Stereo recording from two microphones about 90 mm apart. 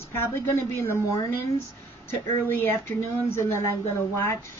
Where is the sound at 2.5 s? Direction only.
20° left (ahead or behind).